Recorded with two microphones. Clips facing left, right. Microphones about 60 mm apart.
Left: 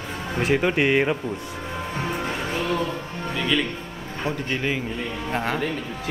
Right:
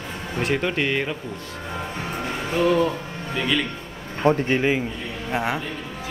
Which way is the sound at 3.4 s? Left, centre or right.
Centre.